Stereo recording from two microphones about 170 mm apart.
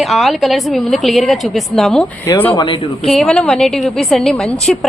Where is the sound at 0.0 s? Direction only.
Centre (ahead or behind).